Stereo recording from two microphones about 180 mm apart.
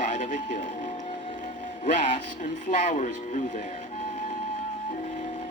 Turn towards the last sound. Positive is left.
turn(degrees=40)  # may be behind; listen again after turning